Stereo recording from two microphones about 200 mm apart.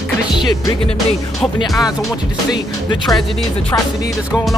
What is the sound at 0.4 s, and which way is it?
Music, 20° left (ahead or behind).